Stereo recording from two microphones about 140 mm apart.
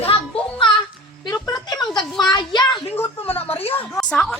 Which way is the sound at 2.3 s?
30° left (ahead or behind).